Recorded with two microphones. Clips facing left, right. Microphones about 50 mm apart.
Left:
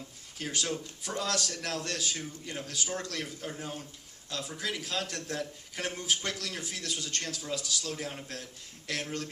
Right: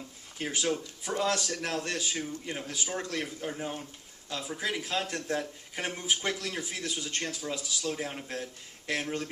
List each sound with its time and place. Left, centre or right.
0.3 s speech: centre